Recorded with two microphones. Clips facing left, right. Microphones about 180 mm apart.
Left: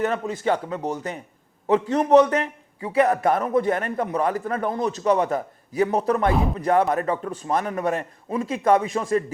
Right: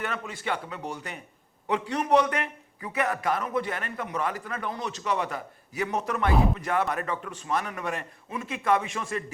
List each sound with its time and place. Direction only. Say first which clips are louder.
0.0 s a man's voice: left 10 dB; 40° left (ahead or behind)
3.2 s a man's voice: left 8 dB; 45° left (ahead or behind)